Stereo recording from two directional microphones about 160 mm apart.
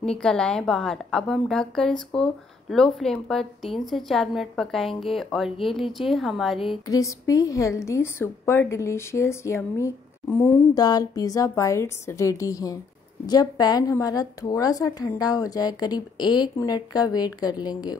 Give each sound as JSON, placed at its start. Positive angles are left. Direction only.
{"t": 0.0, "sound": "a woman's voice", "side_deg": 5}
{"t": 6.9, "sound": "a woman's voice", "side_deg": 20}